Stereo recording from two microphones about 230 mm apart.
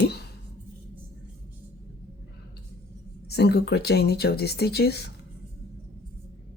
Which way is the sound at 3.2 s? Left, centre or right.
Left.